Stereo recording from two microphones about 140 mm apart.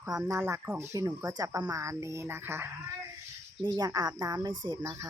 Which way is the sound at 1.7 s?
20° right (ahead or behind).